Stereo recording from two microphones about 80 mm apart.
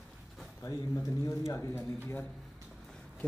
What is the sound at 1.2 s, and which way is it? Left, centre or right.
Speech, left.